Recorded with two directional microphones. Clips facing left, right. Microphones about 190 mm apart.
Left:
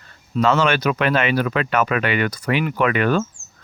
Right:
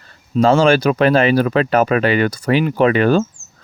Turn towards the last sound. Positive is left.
turn(degrees=-30)  # may be behind; listen again after turning